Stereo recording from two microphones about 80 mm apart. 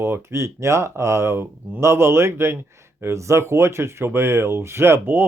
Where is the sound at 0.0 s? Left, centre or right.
Right.